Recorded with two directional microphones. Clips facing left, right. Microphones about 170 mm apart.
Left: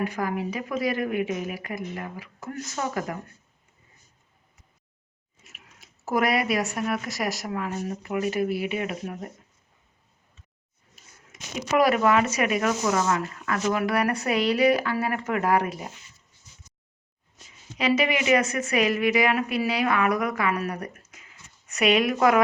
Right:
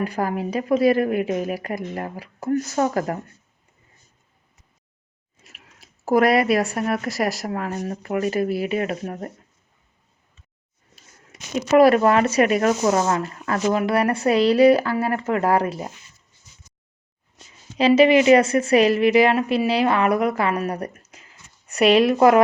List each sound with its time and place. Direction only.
0.0 s a woman's voice: 35° right (ahead or behind)
6.1 s a woman's voice: 35° right (ahead or behind)
11.3 s a sound: 35° right (ahead or behind)
11.7 s a woman's voice: 30° right (ahead or behind)
17.3 s a woman's voice: 30° right (ahead or behind)